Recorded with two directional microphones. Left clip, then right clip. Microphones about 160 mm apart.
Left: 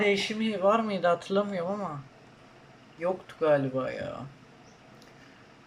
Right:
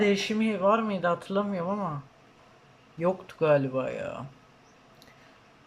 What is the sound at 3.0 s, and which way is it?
Speech, 20° right (ahead or behind).